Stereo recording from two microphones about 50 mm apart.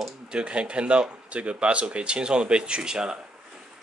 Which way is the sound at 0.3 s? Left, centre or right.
Right.